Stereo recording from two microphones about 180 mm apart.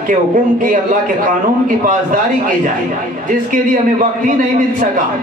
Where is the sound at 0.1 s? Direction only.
50° right (ahead or behind).